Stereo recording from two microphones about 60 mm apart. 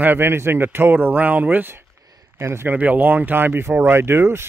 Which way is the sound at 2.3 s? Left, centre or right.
Right.